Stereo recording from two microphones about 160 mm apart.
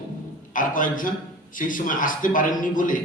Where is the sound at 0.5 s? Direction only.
55° left (ahead or behind).